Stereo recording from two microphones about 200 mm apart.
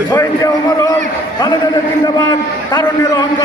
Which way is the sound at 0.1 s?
15° left (ahead or behind).